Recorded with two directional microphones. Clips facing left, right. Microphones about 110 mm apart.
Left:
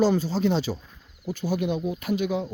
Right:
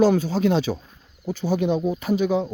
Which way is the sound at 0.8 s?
25° right (ahead or behind).